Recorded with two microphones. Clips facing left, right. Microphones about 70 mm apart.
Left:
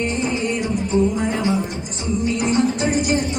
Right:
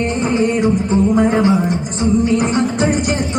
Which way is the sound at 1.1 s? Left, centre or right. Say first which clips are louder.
Right 9 dB; right.